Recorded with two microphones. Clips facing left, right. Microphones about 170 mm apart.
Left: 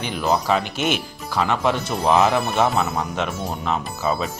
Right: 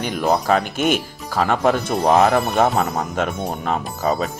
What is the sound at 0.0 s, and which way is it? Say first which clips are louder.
Speech: right 2 dB; 45° right (ahead or behind).